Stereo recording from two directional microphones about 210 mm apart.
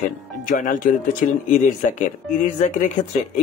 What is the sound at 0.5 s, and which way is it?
Speech, 40° left (ahead or behind).